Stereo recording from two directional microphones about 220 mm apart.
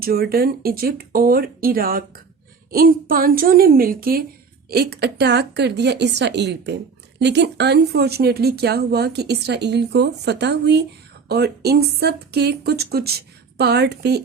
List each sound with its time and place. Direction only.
0.0 s a woman's voice: 45° right (ahead or behind)